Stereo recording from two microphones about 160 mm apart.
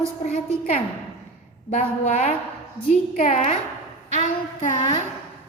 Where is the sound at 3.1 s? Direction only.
55° left (ahead or behind).